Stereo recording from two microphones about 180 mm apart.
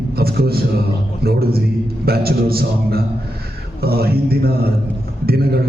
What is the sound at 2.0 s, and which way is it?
A man's voice, 60° right (ahead or behind).